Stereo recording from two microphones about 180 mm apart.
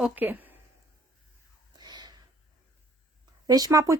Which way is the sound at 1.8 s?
25° right (ahead or behind).